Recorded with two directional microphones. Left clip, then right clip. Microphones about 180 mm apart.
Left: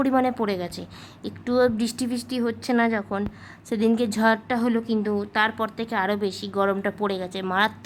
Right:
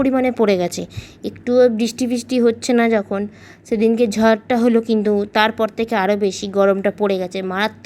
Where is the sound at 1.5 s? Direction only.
10° right (ahead or behind).